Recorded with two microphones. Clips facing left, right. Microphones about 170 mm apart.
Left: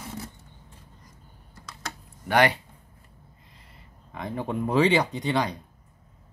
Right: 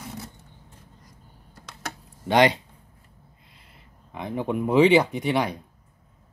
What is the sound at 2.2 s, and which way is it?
Speech, 20° right (ahead or behind).